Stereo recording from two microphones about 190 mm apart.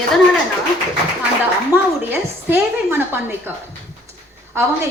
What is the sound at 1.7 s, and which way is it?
A woman's voice, 10° right (ahead or behind).